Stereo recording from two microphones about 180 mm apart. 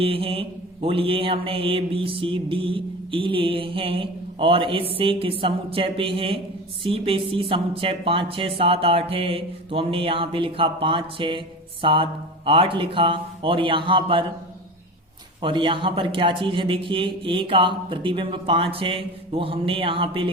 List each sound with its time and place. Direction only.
0.0 s mantra: 30° right (ahead or behind)
12.5 s a man's voice: 30° right (ahead or behind)
15.4 s a man's voice: 25° right (ahead or behind)